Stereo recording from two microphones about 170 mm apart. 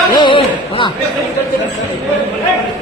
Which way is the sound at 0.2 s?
30° left (ahead or behind).